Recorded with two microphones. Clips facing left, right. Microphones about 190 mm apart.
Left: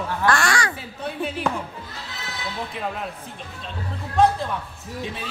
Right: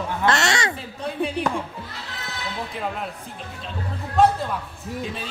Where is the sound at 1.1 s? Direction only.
Centre (ahead or behind).